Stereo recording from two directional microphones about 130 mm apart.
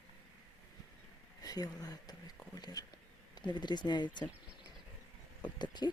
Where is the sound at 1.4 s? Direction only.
30° left (ahead or behind).